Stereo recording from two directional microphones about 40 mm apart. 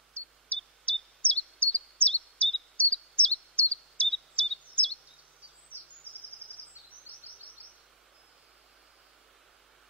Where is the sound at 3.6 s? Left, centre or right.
Left.